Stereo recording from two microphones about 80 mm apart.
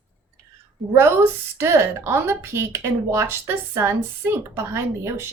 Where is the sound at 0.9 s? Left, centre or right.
Right.